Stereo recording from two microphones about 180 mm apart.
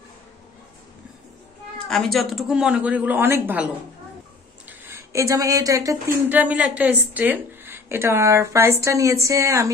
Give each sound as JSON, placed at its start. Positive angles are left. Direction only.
{"t": 1.9, "sound": "a woman's voice", "side_deg": 0}